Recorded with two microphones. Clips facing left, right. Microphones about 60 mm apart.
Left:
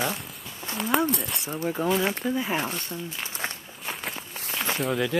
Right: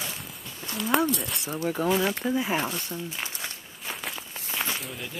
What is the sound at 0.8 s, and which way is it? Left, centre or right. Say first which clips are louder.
Speech: even; centre.